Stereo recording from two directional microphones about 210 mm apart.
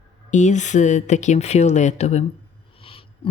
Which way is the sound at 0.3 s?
35° left (ahead or behind).